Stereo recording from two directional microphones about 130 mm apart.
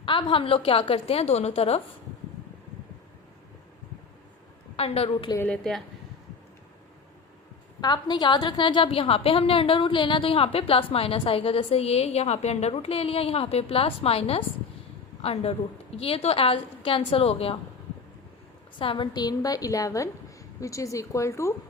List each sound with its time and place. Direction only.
0.0 s a woman's voice: 40° left (ahead or behind)
4.8 s a woman's voice: 50° left (ahead or behind)
5.4 s a woman's voice: 5° left (ahead or behind)
7.8 s a woman's voice: 35° left (ahead or behind)
18.8 s a woman's voice: 40° left (ahead or behind); by 21.5 s 20° left (ahead or behind)